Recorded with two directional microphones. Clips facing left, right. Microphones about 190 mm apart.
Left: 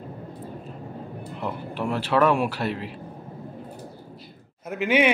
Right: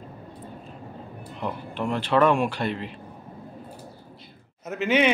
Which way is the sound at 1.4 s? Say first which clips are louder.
Even; 10° left (ahead or behind).